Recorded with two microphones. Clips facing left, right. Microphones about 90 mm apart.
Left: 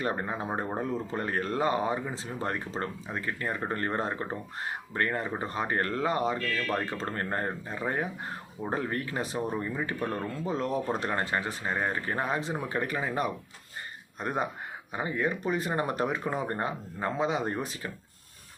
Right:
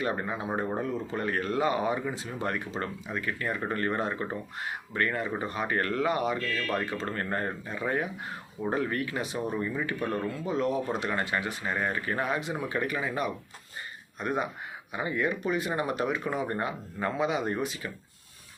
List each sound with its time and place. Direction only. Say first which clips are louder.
0.0 s speech: even; 35° left (ahead or behind)